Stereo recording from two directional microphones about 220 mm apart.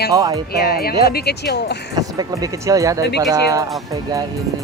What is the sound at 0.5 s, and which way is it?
Speech, 45° left (ahead or behind).